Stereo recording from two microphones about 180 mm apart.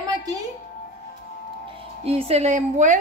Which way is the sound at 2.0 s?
35° right (ahead or behind).